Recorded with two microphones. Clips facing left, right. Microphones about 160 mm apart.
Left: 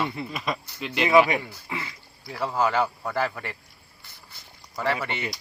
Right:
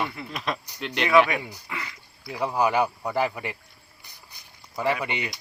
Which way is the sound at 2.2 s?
15° right (ahead or behind).